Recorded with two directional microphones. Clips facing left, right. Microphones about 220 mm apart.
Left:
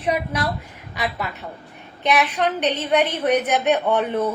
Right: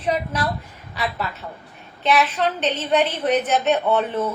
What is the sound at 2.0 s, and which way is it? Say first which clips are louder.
A woman's voice: even; 15° left (ahead or behind).